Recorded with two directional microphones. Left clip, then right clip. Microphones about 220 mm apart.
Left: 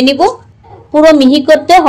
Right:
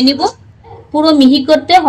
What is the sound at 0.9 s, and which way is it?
Speech, 25° left (ahead or behind).